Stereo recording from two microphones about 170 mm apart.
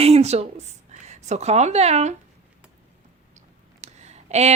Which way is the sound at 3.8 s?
40° right (ahead or behind).